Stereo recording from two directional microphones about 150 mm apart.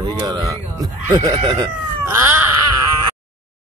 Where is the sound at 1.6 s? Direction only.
20° right (ahead or behind).